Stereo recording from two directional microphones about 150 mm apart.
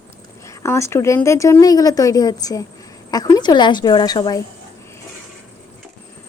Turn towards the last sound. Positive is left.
turn(degrees=25)  # may be behind; listen again after turning